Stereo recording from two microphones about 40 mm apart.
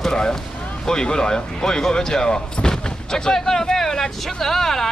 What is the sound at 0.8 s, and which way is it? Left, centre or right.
Speech, centre.